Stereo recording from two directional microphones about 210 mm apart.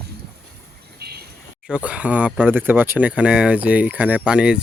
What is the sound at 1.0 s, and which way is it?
Vehicle, 50° right (ahead or behind).